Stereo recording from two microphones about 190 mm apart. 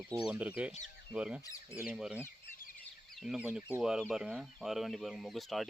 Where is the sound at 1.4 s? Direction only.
15° left (ahead or behind).